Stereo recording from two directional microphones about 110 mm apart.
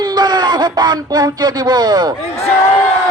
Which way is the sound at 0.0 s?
40° right (ahead or behind).